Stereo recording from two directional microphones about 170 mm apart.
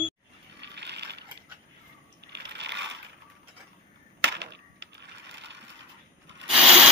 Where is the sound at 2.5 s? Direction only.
90° right.